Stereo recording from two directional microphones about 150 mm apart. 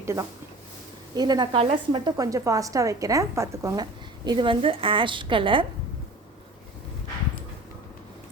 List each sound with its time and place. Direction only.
0.0 s a woman's voice: 20° right (ahead or behind)
4.3 s a woman's voice: 35° right (ahead or behind)